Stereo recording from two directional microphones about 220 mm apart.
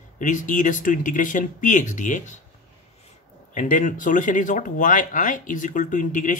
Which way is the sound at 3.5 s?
35° left (ahead or behind).